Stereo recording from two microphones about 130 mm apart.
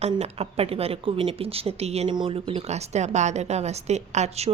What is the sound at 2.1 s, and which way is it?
A woman's voice, 40° right (ahead or behind).